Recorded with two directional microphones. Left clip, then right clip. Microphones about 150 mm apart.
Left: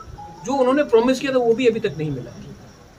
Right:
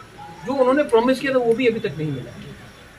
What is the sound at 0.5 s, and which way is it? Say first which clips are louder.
Speech: even; 35° left (ahead or behind).